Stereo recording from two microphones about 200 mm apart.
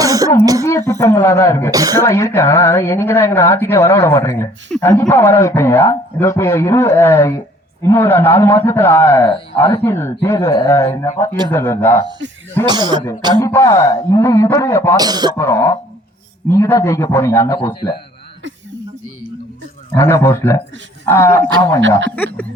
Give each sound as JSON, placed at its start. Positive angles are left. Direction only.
{"t": 0.0, "sound": "throat clearing", "side_deg": -15}
{"t": 0.6, "sound": "speech", "side_deg": 15}
{"t": 1.7, "sound": "speech", "side_deg": -15}
{"t": 2.0, "sound": "speech", "side_deg": 15}
{"t": 12.6, "sound": "speech", "side_deg": -20}
{"t": 13.4, "sound": "speech", "side_deg": 15}
{"t": 14.9, "sound": "speech", "side_deg": -20}
{"t": 15.4, "sound": "speech", "side_deg": 15}
{"t": 20.0, "sound": "speech", "side_deg": 15}